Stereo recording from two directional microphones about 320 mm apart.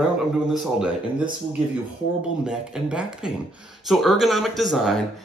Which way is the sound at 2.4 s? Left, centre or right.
Centre.